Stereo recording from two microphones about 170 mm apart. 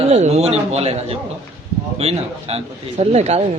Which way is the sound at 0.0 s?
40° right (ahead or behind).